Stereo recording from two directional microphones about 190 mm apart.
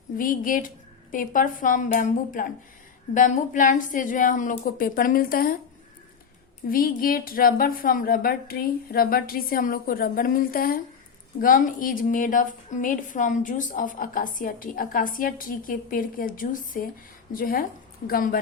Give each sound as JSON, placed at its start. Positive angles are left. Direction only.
{"t": 0.2, "sound": "a woman's voice", "side_deg": 45}
{"t": 6.7, "sound": "a woman's voice", "side_deg": 50}